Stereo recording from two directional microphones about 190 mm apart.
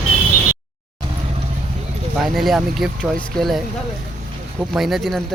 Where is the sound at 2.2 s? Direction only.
Centre (ahead or behind).